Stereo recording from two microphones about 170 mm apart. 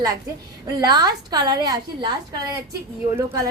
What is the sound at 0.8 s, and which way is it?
A woman's voice, 25° right (ahead or behind).